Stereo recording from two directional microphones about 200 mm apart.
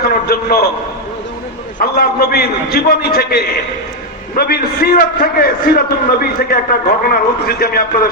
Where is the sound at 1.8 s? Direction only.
50° left (ahead or behind).